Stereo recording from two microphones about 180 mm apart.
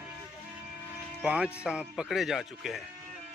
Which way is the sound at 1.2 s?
5° right (ahead or behind).